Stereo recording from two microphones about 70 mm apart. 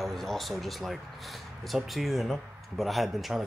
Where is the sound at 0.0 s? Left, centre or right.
Centre.